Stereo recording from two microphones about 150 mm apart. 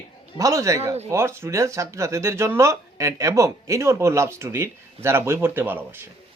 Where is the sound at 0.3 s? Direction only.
20° right (ahead or behind).